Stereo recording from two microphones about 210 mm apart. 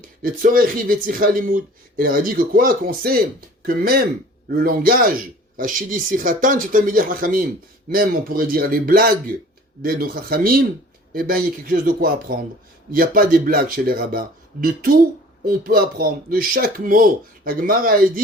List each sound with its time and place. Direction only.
0.2 s speech: 45° right (ahead or behind)